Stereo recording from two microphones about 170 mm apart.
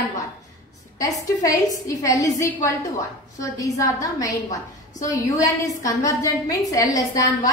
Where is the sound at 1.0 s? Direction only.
20° left (ahead or behind).